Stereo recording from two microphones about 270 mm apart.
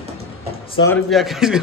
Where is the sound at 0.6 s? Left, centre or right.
Centre.